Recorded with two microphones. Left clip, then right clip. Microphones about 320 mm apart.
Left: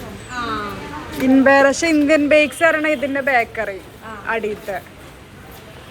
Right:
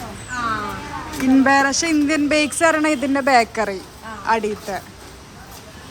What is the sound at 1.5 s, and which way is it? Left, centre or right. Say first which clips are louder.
Speech: left 6 dB; centre.